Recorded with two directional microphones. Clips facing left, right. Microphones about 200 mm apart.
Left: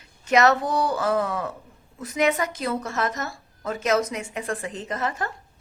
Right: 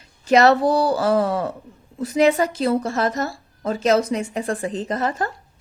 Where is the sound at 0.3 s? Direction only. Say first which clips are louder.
Right 5 dB; 30° right (ahead or behind).